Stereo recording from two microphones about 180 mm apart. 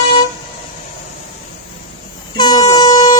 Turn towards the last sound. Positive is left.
turn(degrees=20)  # may be behind; listen again after turning